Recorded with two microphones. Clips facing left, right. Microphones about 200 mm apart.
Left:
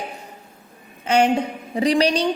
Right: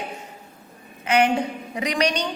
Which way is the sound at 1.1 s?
30° left (ahead or behind).